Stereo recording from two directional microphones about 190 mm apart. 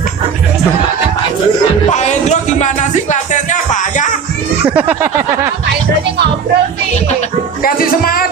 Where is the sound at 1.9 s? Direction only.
40° left (ahead or behind).